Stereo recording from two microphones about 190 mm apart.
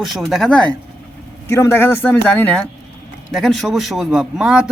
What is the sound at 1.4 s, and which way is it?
Speech, 15° left (ahead or behind).